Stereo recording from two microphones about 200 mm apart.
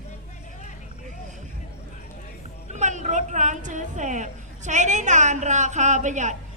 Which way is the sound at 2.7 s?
35° right (ahead or behind).